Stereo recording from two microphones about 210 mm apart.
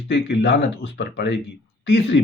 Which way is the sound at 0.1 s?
55° left (ahead or behind).